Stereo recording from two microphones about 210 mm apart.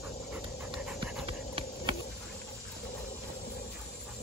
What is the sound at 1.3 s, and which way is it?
Clip-clop, 25° right (ahead or behind).